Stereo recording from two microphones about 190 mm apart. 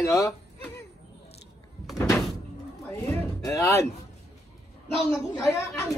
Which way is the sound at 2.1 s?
Centre (ahead or behind).